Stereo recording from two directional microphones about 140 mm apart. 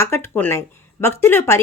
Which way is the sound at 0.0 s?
15° left (ahead or behind).